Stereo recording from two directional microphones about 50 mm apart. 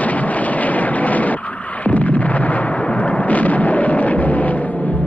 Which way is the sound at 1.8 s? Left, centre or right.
Left.